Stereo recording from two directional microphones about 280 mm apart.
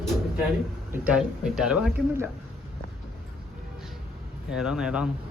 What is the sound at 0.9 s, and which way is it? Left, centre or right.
Speech, centre.